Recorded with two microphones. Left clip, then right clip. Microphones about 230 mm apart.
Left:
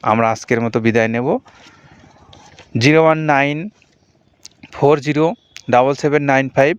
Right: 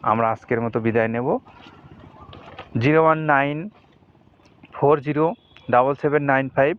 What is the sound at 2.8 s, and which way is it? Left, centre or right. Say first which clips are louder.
Speech: left 5 dB; left.